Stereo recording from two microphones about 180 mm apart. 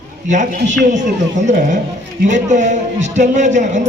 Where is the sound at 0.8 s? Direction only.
45° right (ahead or behind).